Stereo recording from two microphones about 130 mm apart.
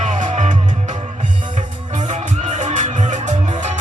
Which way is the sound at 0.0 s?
70° right (ahead or behind).